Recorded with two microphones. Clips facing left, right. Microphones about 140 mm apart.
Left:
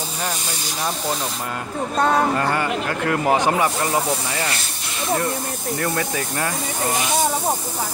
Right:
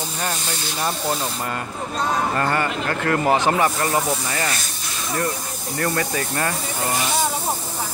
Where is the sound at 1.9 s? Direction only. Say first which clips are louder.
Left 5 dB; 65° left (ahead or behind).